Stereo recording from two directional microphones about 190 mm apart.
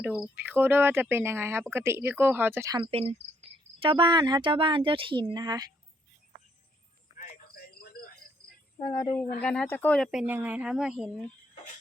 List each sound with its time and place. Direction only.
0.0 s speech: 5° right (ahead or behind); by 5.6 s 20° right (ahead or behind)
7.2 s a sound: 55° left (ahead or behind)
8.8 s speech: 15° left (ahead or behind); by 11.3 s 5° right (ahead or behind)